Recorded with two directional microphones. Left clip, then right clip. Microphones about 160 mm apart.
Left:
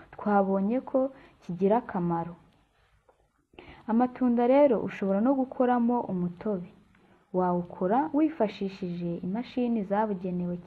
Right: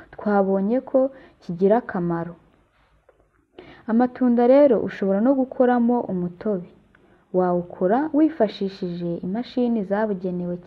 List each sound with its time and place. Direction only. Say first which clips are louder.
0.1 s a woman's voice: right 5 dB; 20° right (ahead or behind)
3.6 s a woman's voice: right 5 dB; 20° right (ahead or behind)